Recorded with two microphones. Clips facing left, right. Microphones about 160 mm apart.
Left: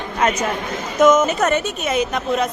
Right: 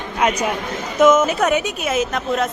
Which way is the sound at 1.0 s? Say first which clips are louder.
Even; 5° right (ahead or behind).